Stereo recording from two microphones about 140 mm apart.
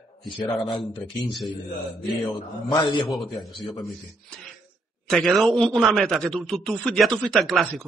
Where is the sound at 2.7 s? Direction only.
35° left (ahead or behind).